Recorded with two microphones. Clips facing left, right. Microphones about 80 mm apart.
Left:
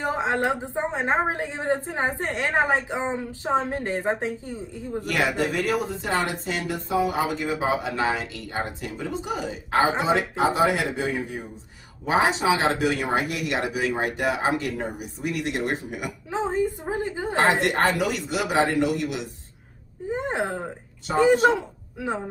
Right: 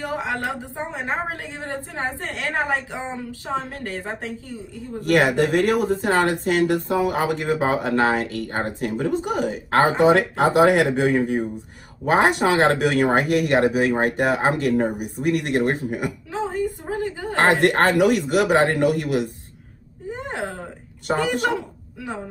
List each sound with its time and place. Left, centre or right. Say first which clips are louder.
0.0 s a woman's voice: left 2 dB; left
5.0 s speech: right 7 dB; right
16.3 s a sound: left 3 dB; left
17.4 s speech: right 4 dB; right
20.1 s a sound: left 2 dB; left
21.2 s a man's voice: left 7 dB; left